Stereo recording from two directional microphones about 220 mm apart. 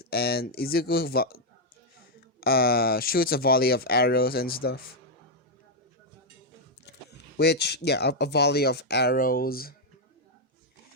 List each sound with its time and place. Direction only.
0.0 s speech: 45° left (ahead or behind)
2.4 s speech: 45° left (ahead or behind)
7.3 s speech: 50° left (ahead or behind)